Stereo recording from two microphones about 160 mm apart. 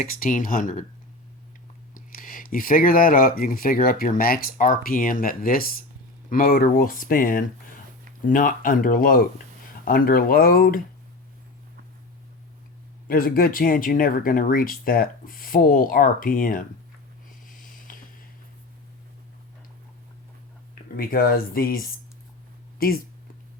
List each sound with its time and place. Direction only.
0.0 s speech: 60° left (ahead or behind)
1.9 s speech: 60° left (ahead or behind)
13.1 s speech: 65° left (ahead or behind)
17.4 s a sound: 55° left (ahead or behind)
20.9 s speech: 65° left (ahead or behind)
22.8 s speech: 70° left (ahead or behind)